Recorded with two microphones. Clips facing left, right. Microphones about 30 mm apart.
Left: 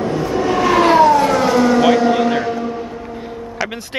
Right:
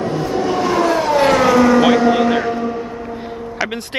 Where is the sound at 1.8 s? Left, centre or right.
Centre.